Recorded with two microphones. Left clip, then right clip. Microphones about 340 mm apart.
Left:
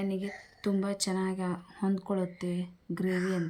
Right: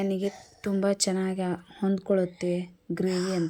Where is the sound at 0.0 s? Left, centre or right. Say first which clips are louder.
Right 6 dB; centre.